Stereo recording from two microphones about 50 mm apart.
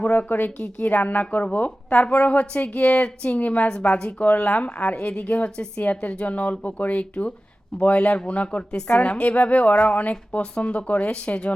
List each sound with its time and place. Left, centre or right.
0.0 s a woman's voice: left
3.7 s a woman's voice: centre